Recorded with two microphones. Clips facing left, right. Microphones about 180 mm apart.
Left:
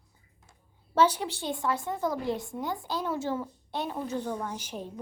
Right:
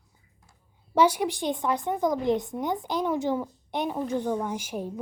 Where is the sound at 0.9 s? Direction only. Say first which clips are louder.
Right 3 dB; 15° right (ahead or behind).